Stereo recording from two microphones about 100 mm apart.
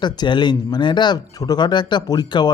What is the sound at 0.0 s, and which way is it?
Speech, 50° left (ahead or behind).